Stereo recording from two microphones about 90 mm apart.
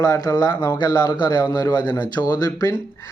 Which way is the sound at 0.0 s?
45° left (ahead or behind).